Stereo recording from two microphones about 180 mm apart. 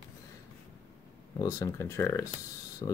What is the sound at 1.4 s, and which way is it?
Speech, 15° left (ahead or behind).